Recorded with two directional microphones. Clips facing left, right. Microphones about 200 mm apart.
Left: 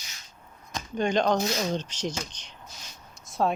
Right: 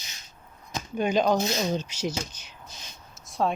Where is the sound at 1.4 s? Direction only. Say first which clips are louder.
Right 1 dB; 20° right (ahead or behind).